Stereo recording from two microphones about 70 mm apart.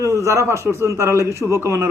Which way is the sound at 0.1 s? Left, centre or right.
Right.